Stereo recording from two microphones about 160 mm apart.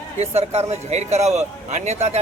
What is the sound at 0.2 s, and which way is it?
A man's voice, 40° right (ahead or behind).